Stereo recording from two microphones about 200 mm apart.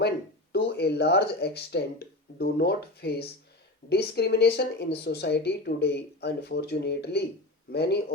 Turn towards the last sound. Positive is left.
turn(degrees=55)  # may be behind; listen again after turning